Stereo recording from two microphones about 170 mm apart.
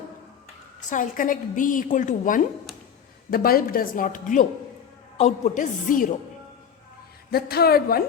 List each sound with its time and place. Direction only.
0.9 s a woman's voice: 50° left (ahead or behind)
3.2 s a woman's voice: 60° left (ahead or behind)
7.3 s a woman's voice: 65° left (ahead or behind)